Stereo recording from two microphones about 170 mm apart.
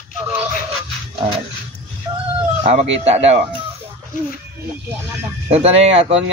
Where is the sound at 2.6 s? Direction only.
40° right (ahead or behind).